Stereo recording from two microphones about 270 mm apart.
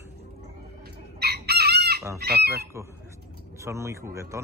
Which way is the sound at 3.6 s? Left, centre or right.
Centre.